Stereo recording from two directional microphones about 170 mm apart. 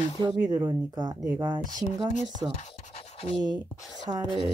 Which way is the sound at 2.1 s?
40° left (ahead or behind).